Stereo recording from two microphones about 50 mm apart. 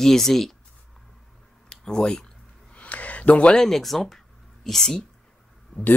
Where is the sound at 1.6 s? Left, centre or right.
Centre.